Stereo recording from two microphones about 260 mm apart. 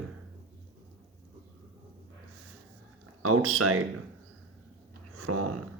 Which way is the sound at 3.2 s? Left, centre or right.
Right.